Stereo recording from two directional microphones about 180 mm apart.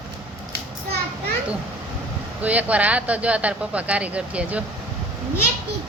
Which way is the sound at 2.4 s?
10° right (ahead or behind).